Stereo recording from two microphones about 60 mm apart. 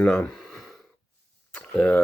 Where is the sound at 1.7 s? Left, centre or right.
Left.